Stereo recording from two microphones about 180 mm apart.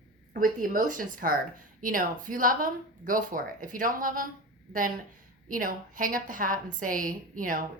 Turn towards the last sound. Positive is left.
turn(degrees=-50)  # may be behind; listen again after turning